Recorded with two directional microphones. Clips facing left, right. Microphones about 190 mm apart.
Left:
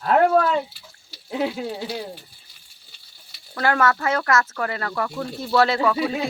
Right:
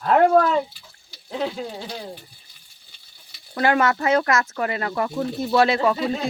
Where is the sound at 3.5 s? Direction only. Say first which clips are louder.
Right 1 dB; 20° right (ahead or behind).